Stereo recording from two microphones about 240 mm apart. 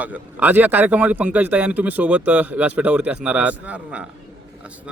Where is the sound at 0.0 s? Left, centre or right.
Centre.